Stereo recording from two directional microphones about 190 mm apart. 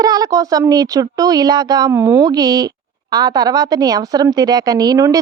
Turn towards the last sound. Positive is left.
turn(degrees=-20)  # may be behind; listen again after turning